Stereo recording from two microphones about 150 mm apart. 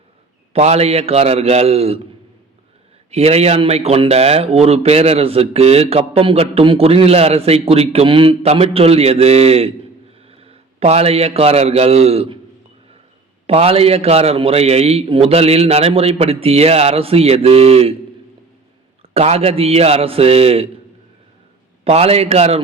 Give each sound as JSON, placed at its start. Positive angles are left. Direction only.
{"t": 0.5, "sound": "speech", "side_deg": -45}
{"t": 3.1, "sound": "a man's voice", "side_deg": -45}
{"t": 13.5, "sound": "a man's voice", "side_deg": -40}
{"t": 19.1, "sound": "speech", "side_deg": -45}
{"t": 21.8, "sound": "speech", "side_deg": -40}